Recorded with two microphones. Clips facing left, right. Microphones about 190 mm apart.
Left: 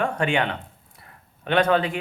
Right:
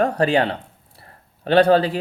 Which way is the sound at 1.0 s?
35° right (ahead or behind).